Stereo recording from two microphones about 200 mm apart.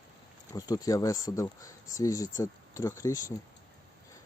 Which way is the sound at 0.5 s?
20° left (ahead or behind).